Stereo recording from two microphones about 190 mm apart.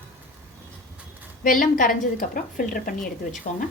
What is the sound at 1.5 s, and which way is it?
A woman's voice, 45° left (ahead or behind).